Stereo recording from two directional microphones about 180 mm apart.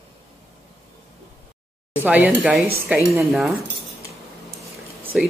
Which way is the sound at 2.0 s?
10° right (ahead or behind).